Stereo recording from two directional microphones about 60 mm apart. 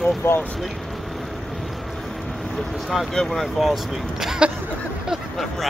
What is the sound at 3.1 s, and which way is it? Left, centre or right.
Speech, centre.